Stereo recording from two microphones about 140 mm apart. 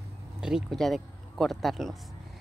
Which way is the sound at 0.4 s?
5° right (ahead or behind).